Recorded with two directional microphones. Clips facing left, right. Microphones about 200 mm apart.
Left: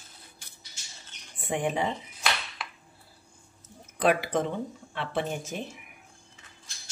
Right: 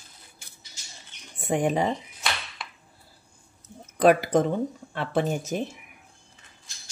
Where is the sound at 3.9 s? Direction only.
45° right (ahead or behind).